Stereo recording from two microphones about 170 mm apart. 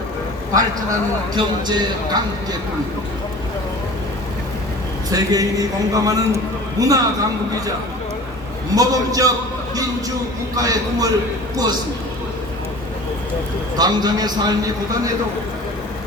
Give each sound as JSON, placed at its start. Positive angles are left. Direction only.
{"t": 1.4, "sound": "a man's voice", "side_deg": -25}
{"t": 5.1, "sound": "a man's voice", "side_deg": -20}
{"t": 8.7, "sound": "a man's voice", "side_deg": -20}
{"t": 10.5, "sound": "a man's voice", "side_deg": -20}
{"t": 13.7, "sound": "a man's voice", "side_deg": -25}